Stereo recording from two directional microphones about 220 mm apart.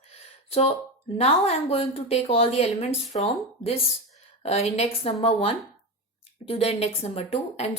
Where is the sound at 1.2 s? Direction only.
30° left (ahead or behind).